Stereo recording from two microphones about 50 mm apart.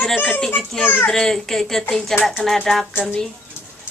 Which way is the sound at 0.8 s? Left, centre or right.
Left.